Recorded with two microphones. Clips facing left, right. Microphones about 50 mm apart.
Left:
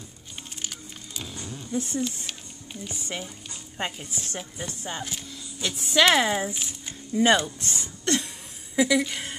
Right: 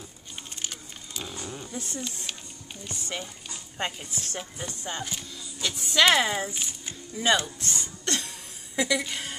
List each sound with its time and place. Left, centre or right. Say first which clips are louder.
0.6 s music: even; centre
1.3 s zipper: right 1 dB; right
1.7 s speech: left 7 dB; centre
7.2 s a woman's voice: left 4 dB; left; by 9.3 s centre